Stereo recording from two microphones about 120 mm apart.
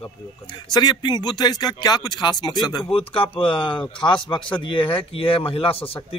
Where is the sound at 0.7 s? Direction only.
35° left (ahead or behind).